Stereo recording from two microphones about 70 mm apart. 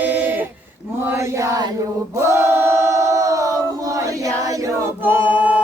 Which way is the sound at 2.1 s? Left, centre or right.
Right.